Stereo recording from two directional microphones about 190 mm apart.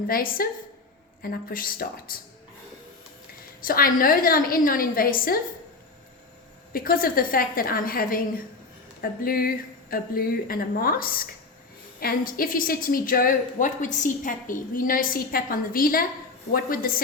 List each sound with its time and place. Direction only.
0.1 s a woman's voice: 50° left (ahead or behind)
3.6 s a woman's voice: 50° left (ahead or behind)
6.7 s a woman's voice: 50° left (ahead or behind)